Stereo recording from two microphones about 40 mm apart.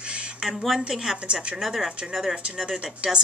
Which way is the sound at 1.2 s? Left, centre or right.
Right.